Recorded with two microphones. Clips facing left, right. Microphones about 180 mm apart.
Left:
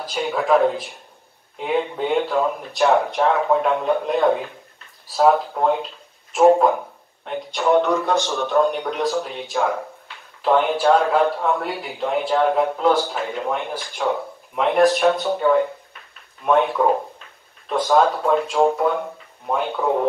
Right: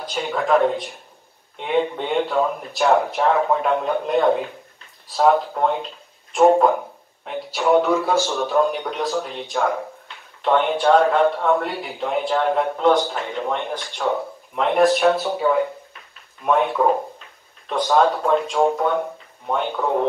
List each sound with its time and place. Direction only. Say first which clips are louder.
0.0 s a man's voice: left 1 dB; centre (ahead or behind)